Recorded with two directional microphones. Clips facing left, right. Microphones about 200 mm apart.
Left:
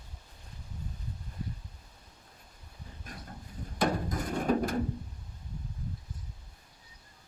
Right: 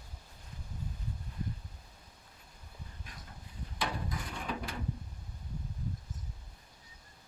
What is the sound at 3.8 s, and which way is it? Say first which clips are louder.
Drawer open or close: left 8 dB; 45° left (ahead or behind).